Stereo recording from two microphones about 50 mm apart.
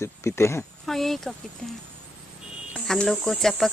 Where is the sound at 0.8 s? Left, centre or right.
Centre.